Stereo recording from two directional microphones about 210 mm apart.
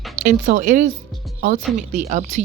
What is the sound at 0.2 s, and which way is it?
A woman's voice, 40° right (ahead or behind).